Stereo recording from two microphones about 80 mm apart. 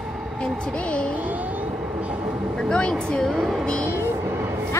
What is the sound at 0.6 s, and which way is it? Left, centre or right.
Speech, centre.